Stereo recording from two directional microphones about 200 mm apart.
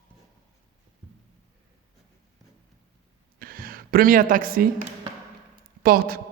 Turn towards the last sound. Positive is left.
turn(degrees=-45)  # may be behind; listen again after turning